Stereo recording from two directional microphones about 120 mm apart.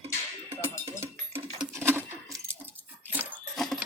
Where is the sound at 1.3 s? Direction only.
50° right (ahead or behind).